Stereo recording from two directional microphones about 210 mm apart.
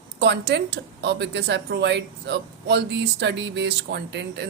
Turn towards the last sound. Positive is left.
turn(degrees=-55)  # may be behind; listen again after turning